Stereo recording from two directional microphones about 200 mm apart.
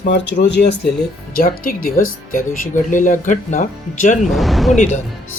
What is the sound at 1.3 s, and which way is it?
Speech, 45° left (ahead or behind).